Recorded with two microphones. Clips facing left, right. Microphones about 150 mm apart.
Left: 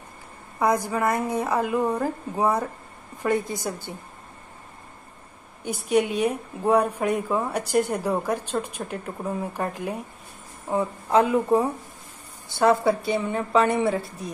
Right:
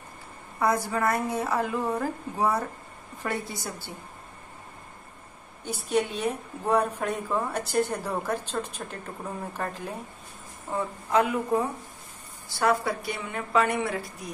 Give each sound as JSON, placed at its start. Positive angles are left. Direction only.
{"t": 0.6, "sound": "a woman's voice", "side_deg": 15}
{"t": 5.7, "sound": "a woman's voice", "side_deg": 15}
{"t": 11.1, "sound": "a woman's voice", "side_deg": 30}